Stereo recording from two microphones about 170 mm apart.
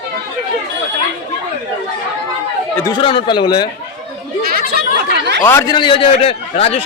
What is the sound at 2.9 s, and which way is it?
Speech, 30° left (ahead or behind).